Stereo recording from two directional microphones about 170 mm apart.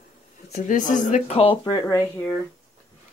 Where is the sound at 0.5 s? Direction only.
50° left (ahead or behind).